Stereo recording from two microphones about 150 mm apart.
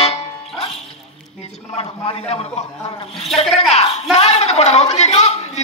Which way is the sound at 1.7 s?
40° left (ahead or behind).